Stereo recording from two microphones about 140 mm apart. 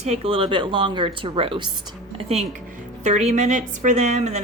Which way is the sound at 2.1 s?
50° right (ahead or behind).